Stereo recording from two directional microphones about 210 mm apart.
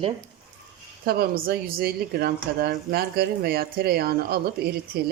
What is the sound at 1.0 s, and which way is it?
Speech, 45° right (ahead or behind).